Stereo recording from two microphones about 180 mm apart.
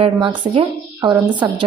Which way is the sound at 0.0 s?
30° right (ahead or behind).